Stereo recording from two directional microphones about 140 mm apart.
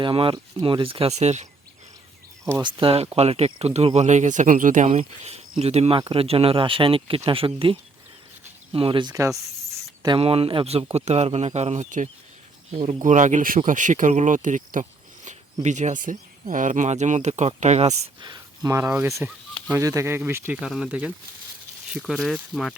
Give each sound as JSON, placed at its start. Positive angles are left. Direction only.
{"t": 0.0, "sound": "speech", "side_deg": -40}
{"t": 2.4, "sound": "speech", "side_deg": -20}
{"t": 2.6, "sound": "speech", "side_deg": -40}
{"t": 4.9, "sound": "speech", "side_deg": -45}
{"t": 10.2, "sound": "speech", "side_deg": -45}
{"t": 12.7, "sound": "speech", "side_deg": -45}
{"t": 13.0, "sound": "speech", "side_deg": -65}
{"t": 18.2, "sound": "speech", "side_deg": -30}
{"t": 20.6, "sound": "speech", "side_deg": -5}